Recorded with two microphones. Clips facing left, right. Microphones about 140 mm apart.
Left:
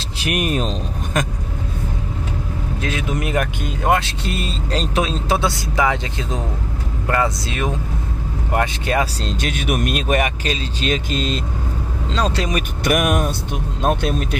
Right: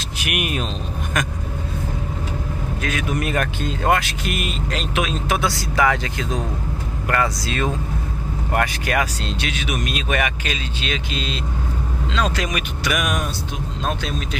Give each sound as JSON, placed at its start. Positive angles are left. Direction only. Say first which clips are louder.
{"t": 0.2, "sound": "speech", "louder": "left 4 dB", "side_deg": 35}
{"t": 2.8, "sound": "speech", "louder": "even", "side_deg": 25}
{"t": 9.4, "sound": "speech", "louder": "left 5 dB", "side_deg": 50}
{"t": 12.1, "sound": "speech", "louder": "left 2 dB", "side_deg": 30}
{"t": 12.8, "sound": "speech", "louder": "left 6 dB", "side_deg": 50}